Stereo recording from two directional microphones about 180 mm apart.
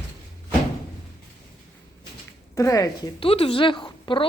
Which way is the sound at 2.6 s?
20° left (ahead or behind).